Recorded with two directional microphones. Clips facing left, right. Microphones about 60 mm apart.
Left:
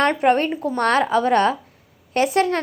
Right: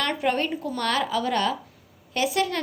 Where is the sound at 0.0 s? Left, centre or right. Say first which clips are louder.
Left 7 dB; left.